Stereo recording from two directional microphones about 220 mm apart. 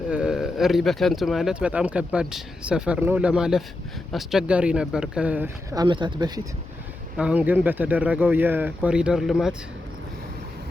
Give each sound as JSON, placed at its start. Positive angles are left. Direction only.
{"t": 0.1, "sound": "speech", "side_deg": -5}
{"t": 5.8, "sound": "speech", "side_deg": -20}
{"t": 7.2, "sound": "speech", "side_deg": -5}